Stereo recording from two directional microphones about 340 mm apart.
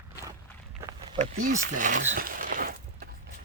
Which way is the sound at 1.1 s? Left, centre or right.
Right.